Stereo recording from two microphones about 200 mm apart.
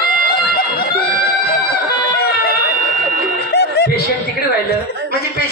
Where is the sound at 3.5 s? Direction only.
55° left (ahead or behind).